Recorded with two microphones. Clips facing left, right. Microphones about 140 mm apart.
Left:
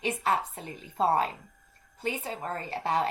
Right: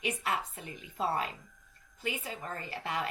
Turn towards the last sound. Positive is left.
turn(degrees=35)  # may be behind; listen again after turning